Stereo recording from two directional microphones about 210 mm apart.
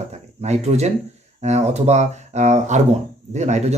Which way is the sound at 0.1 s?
30° right (ahead or behind).